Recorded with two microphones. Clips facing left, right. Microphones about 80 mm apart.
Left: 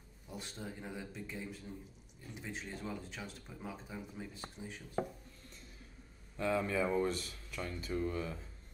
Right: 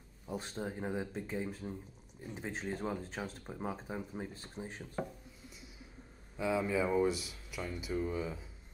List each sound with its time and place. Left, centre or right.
0.3 s speech: right
6.3 s speech: centre